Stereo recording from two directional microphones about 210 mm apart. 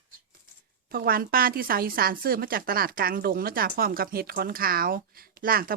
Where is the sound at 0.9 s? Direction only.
45° right (ahead or behind).